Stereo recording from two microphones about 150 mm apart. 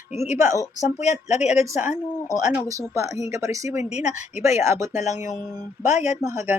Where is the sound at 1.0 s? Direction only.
45° left (ahead or behind).